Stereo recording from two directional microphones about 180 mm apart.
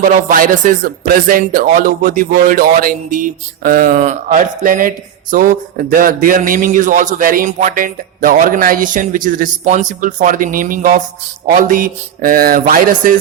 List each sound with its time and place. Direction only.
0.0 s speech: 50° right (ahead or behind)